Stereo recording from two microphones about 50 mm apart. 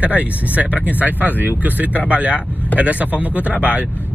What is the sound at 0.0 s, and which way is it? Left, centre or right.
Speech, right.